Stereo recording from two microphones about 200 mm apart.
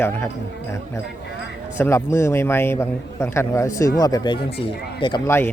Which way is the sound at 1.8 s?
10° left (ahead or behind).